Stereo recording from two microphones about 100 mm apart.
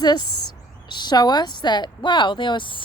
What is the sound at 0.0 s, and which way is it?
A woman's voice, 45° left (ahead or behind).